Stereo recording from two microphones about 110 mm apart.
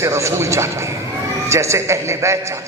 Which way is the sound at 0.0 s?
25° right (ahead or behind).